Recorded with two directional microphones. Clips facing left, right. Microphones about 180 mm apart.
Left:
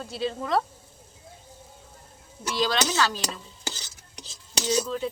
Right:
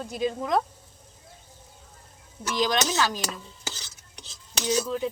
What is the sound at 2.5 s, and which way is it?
Speech, 15° right (ahead or behind).